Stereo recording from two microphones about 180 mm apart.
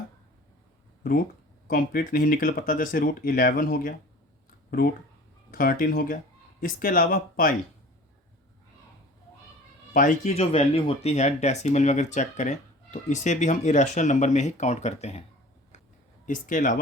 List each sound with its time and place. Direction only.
1.6 s speech: 55° left (ahead or behind)
5.5 s speech: 50° left (ahead or behind)
9.9 s speech: 45° left (ahead or behind)
16.2 s speech: 45° left (ahead or behind)